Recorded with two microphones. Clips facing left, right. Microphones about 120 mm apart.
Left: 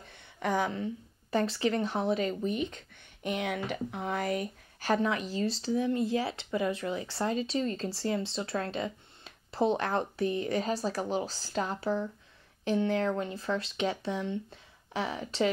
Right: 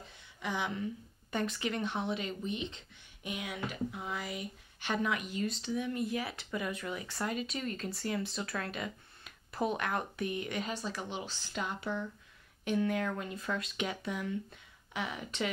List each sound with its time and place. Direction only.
0.4 s speech: 45° left (ahead or behind)
3.3 s speech: 65° left (ahead or behind); by 15.5 s 30° left (ahead or behind)